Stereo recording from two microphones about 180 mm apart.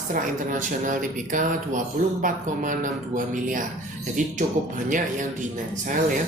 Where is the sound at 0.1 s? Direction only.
45° right (ahead or behind).